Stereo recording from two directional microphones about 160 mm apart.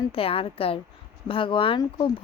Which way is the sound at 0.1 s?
35° left (ahead or behind).